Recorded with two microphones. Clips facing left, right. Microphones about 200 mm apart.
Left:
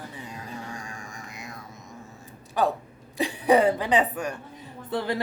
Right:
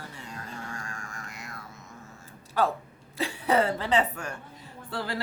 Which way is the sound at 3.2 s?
15° left (ahead or behind).